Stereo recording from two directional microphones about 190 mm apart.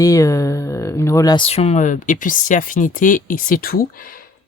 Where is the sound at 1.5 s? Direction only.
35° left (ahead or behind); by 4.1 s 50° left (ahead or behind).